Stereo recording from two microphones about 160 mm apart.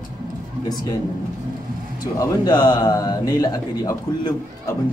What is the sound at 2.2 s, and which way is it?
A man's voice, 25° left (ahead or behind).